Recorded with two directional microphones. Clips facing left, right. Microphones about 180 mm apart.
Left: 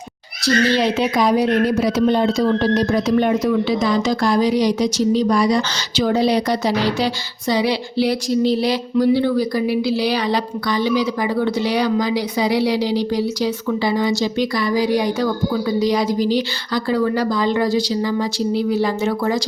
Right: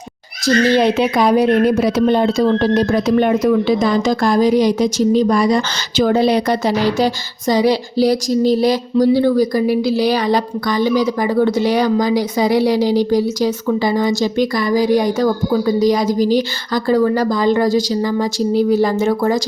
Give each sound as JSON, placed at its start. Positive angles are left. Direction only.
{"t": 0.4, "sound": "speech", "side_deg": -50}